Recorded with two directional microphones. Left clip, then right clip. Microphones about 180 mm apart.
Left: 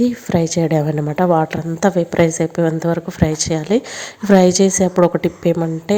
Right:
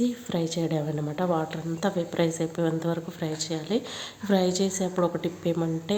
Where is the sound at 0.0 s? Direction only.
40° left (ahead or behind).